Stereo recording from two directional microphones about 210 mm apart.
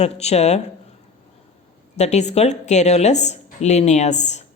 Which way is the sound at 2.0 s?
35° left (ahead or behind).